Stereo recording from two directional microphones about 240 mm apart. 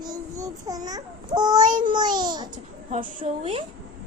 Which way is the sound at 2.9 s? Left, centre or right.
Right.